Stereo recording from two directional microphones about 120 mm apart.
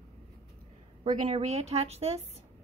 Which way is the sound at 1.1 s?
80° right.